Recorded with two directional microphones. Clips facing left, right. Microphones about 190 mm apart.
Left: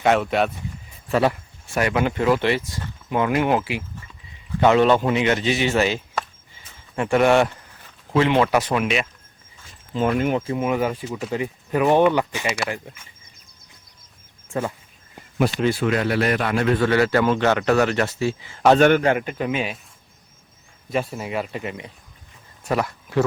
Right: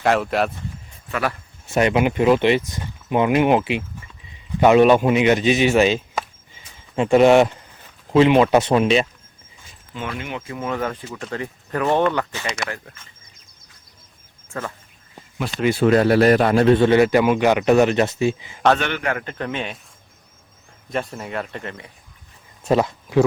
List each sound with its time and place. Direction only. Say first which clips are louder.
0.0 s speech: even; centre (ahead or behind)
1.0 s speech: left 5 dB; 30° left (ahead or behind)
1.6 s a man's voice: right 4 dB; 20° right (ahead or behind)
9.9 s speech: left 9 dB; 40° left (ahead or behind)
10.4 s speech: left 6 dB; 25° left (ahead or behind)
10.7 s speech: even; 10° left (ahead or behind)
15.7 s a man's voice: right 6 dB; 35° right (ahead or behind); by 18.6 s 20° right (ahead or behind)
18.8 s a man's voice: left 11 dB; 45° left (ahead or behind)
19.2 s speech: left 3 dB; 10° left (ahead or behind)
20.9 s speech: left 2 dB; 5° left (ahead or behind)
22.7 s speech: right 5 dB; 20° right (ahead or behind)